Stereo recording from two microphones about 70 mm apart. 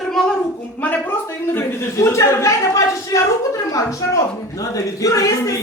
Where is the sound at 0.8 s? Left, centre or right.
Left.